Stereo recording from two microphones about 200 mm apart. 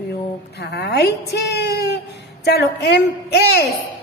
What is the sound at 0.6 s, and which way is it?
A woman's voice, 55° left (ahead or behind).